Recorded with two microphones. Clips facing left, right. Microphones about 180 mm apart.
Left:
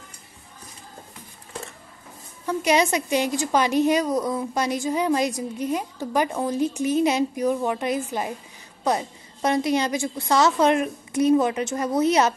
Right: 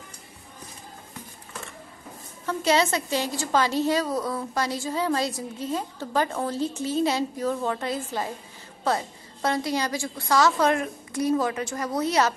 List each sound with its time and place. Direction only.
2.4 s a woman's voice: 15° left (ahead or behind)